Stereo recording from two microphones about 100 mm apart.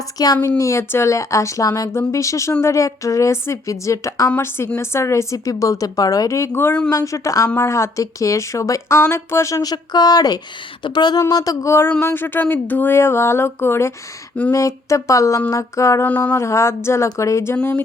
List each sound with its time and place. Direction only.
0.4 s a woman's voice: 30° left (ahead or behind)
6.9 s speech: 35° left (ahead or behind)
11.2 s a woman's voice: 35° left (ahead or behind)
16.0 s mantra: 15° left (ahead or behind)
16.3 s a woman's voice: 30° left (ahead or behind)